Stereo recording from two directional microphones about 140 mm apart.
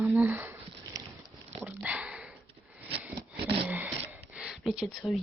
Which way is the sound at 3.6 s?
10° right (ahead or behind).